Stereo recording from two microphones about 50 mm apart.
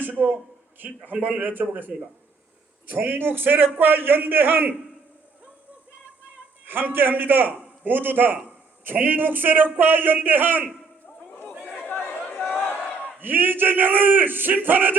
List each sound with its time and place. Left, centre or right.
0.0 s a man's voice: right
6.7 s a man's voice: right
11.9 s chatter: left
13.1 s a man's voice: right